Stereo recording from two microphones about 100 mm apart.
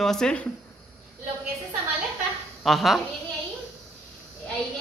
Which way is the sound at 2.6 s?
Centre (ahead or behind).